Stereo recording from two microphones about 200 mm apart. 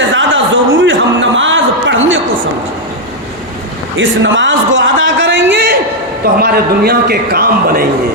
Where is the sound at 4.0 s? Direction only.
70° right (ahead or behind).